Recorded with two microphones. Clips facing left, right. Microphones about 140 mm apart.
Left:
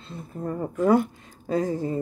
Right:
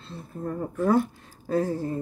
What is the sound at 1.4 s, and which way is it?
Speech, 15° left (ahead or behind).